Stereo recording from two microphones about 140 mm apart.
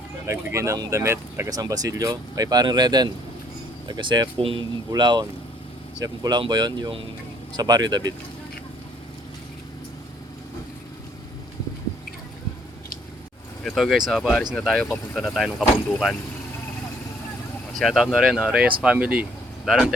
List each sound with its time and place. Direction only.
0.3 s speech: 20° right (ahead or behind)
13.7 s speech: centre (ahead or behind)
17.7 s speech: centre (ahead or behind)